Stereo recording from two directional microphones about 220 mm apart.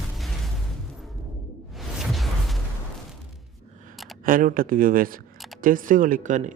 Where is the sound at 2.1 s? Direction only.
Centre (ahead or behind).